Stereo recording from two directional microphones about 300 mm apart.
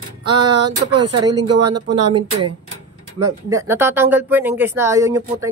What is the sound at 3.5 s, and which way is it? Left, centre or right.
Speech, centre.